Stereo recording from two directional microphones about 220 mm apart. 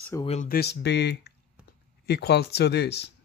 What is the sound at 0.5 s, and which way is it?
Speech, 50° left (ahead or behind).